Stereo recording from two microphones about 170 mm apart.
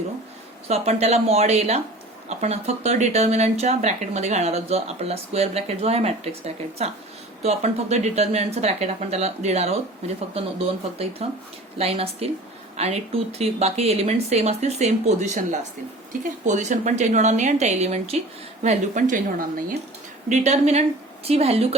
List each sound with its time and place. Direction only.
0.7 s speech: 40° right (ahead or behind)
20.3 s speech: 40° right (ahead or behind)